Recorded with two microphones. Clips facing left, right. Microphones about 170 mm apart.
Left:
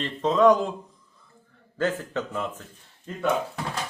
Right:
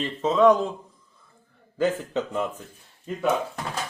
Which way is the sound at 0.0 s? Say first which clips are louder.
Right 1 dB; 5° right (ahead or behind).